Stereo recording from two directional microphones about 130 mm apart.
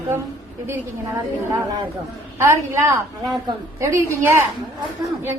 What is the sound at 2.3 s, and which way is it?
A woman's voice, 20° right (ahead or behind).